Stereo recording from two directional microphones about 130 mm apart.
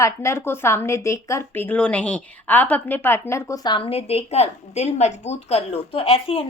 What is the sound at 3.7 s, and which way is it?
A woman's voice, 45° left (ahead or behind).